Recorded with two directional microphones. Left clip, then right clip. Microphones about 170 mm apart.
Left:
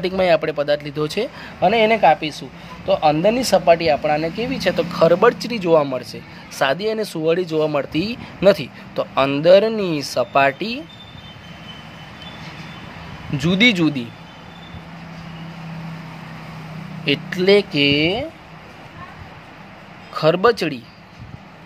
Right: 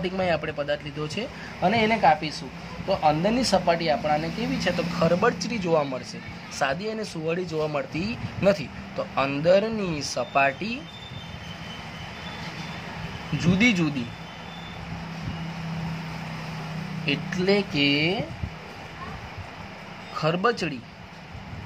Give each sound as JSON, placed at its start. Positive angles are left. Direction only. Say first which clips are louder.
{"t": 0.0, "sound": "speech", "louder": "left 9 dB", "side_deg": 60}
{"t": 6.5, "sound": "speech", "louder": "left 8 dB", "side_deg": 50}
{"t": 13.4, "sound": "speech", "louder": "left 7 dB", "side_deg": 55}
{"t": 17.0, "sound": "speech", "louder": "left 8 dB", "side_deg": 50}
{"t": 20.2, "sound": "speech", "louder": "left 9 dB", "side_deg": 55}